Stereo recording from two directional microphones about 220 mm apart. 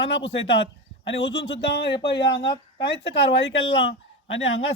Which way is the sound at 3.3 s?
55° left (ahead or behind).